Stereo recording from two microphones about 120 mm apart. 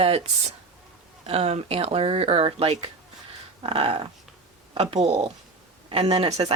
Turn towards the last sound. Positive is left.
turn(degrees=-55)  # may be behind; listen again after turning